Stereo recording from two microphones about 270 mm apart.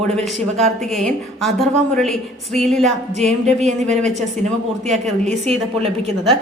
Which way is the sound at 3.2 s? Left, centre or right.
Right.